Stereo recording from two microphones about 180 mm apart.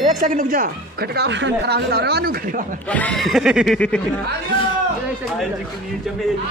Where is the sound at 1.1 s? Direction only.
75° right (ahead or behind); by 2.6 s 60° right (ahead or behind).